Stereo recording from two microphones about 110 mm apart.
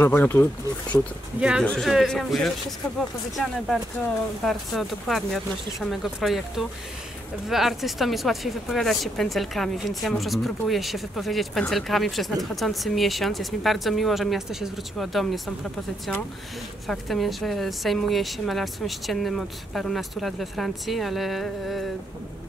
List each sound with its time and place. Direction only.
0.0 s speech: 20° left (ahead or behind)
1.6 s speech: 5° left (ahead or behind)
16.8 s speech: centre (ahead or behind)